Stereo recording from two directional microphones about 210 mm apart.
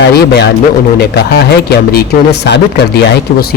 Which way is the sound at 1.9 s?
50° left (ahead or behind).